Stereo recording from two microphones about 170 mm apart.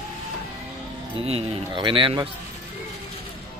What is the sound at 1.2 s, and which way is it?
Speech, 35° right (ahead or behind).